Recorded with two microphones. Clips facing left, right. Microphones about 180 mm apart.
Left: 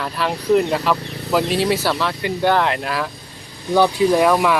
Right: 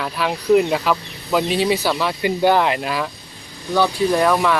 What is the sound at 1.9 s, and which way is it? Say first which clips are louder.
Speech: right 2 dB; 10° right (ahead or behind).